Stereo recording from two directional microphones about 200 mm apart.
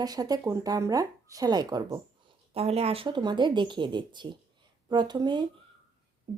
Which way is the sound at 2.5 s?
30° right (ahead or behind).